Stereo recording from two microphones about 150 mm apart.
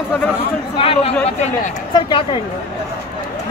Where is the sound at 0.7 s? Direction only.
40° left (ahead or behind).